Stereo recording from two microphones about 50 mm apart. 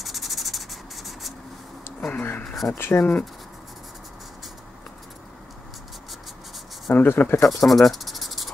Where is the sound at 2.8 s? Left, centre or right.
Left.